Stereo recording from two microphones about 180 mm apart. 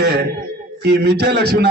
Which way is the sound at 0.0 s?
65° right (ahead or behind).